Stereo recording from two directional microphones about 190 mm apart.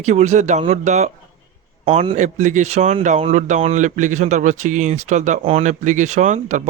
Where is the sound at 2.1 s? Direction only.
40° right (ahead or behind).